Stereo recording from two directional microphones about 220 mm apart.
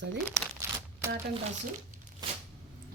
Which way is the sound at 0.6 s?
10° right (ahead or behind).